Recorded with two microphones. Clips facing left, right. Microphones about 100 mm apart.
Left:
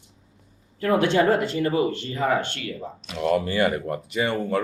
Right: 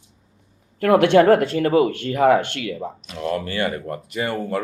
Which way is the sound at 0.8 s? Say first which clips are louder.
Right 6 dB; 70° right (ahead or behind).